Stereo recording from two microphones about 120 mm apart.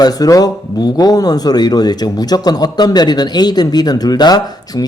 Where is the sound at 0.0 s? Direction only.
30° left (ahead or behind).